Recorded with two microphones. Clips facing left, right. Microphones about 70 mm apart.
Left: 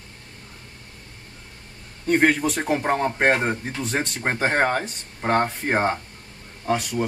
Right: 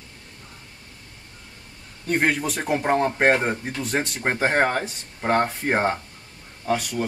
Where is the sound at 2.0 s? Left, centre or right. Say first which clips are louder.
Left 3 dB; centre.